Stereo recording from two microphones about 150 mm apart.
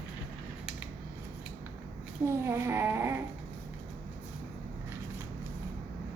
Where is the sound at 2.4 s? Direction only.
15° right (ahead or behind).